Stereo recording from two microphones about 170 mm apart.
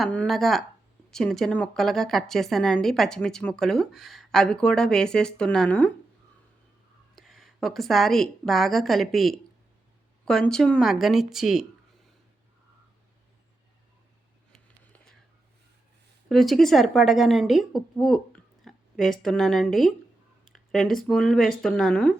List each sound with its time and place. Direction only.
0.0 s a woman's voice: 5° left (ahead or behind)
7.2 s a woman's voice: centre (ahead or behind)
14.5 s a sound: 5° left (ahead or behind)
16.3 s a woman's voice: centre (ahead or behind)